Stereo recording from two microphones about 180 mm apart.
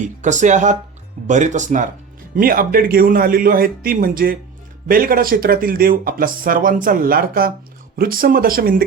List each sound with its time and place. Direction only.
0.0 s speech: 40° right (ahead or behind)